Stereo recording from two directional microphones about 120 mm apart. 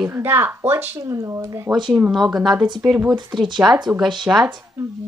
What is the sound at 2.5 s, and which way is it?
Speech, 40° right (ahead or behind).